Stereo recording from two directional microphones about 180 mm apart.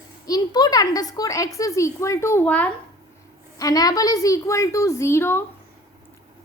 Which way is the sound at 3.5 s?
20° left (ahead or behind).